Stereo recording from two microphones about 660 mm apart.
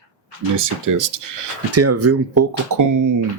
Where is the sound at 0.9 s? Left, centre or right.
Right.